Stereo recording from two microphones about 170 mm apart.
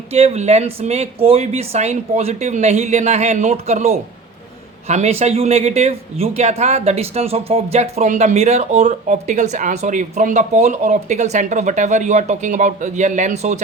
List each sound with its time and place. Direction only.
0.1 s speech: 40° right (ahead or behind)